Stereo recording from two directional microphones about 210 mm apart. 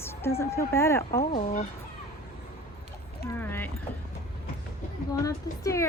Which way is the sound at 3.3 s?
10° left (ahead or behind).